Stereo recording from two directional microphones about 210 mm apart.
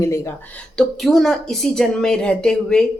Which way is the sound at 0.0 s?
15° left (ahead or behind).